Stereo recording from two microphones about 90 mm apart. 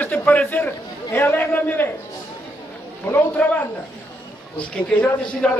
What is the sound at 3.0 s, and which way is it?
Speech, 25° left (ahead or behind).